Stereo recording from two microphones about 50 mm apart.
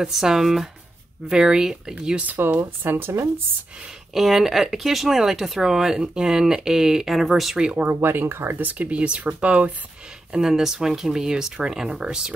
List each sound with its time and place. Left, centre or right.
0.0 s speech: centre
2.2 s speech: right
4.1 s speech: centre
7.5 s speech: right
8.0 s speech: right
8.5 s speech: right
10.4 s speech: centre